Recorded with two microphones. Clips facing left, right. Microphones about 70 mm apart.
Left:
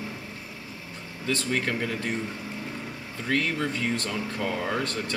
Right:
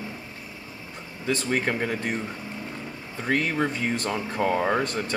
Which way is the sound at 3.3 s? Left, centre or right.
Right.